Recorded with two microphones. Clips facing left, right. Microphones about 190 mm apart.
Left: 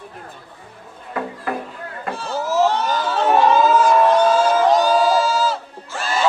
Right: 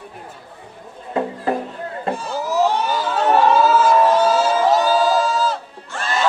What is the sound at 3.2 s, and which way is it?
Crowd, centre (ahead or behind).